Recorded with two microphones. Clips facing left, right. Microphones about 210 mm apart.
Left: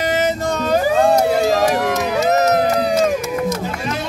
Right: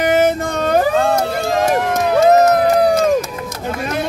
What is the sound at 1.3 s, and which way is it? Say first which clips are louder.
Crowd: left 1 dB; 55° right (ahead or behind).